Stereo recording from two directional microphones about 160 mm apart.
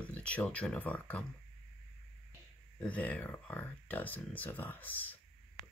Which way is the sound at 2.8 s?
10° left (ahead or behind).